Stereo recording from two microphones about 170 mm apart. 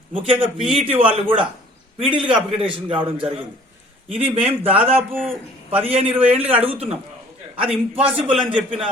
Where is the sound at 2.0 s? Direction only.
30° right (ahead or behind).